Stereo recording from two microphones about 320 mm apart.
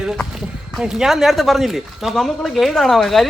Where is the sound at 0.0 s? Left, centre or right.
Centre.